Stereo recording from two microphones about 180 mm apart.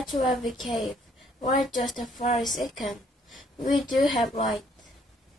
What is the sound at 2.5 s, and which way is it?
Speech, centre (ahead or behind).